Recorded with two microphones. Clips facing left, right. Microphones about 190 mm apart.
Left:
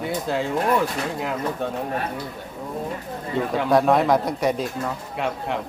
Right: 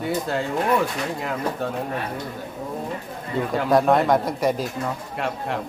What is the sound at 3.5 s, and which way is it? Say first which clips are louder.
Speech: even; centre (ahead or behind).